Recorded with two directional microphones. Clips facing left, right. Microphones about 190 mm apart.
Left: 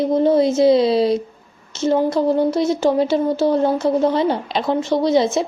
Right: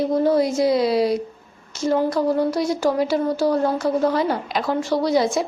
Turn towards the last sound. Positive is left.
turn(degrees=25)  # may be behind; listen again after turning